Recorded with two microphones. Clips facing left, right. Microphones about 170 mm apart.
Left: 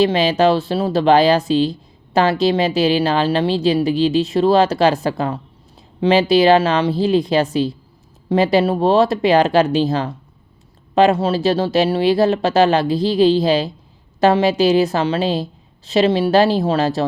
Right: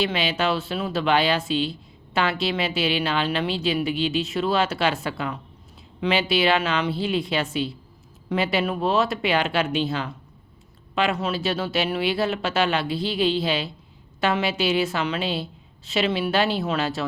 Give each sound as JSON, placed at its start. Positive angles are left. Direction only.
{"t": 0.0, "sound": "speech", "side_deg": 40}